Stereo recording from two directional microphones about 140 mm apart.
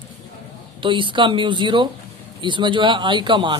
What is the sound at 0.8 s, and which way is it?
Speech, 35° right (ahead or behind).